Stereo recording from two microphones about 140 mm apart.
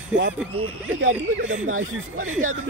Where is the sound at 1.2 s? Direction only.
65° right (ahead or behind).